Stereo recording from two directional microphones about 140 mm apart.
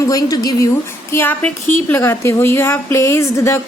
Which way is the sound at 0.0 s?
25° left (ahead or behind).